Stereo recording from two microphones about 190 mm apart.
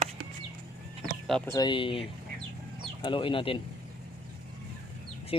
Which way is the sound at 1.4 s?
20° left (ahead or behind).